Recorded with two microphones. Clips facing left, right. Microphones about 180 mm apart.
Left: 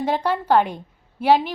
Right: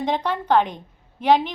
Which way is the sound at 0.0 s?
10° left (ahead or behind).